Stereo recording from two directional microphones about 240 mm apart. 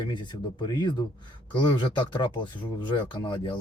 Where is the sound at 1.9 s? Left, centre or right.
Centre.